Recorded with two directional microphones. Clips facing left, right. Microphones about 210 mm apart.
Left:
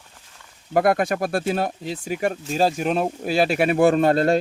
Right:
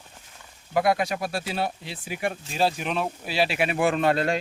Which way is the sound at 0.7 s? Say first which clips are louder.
Left 4 dB; 50° left (ahead or behind).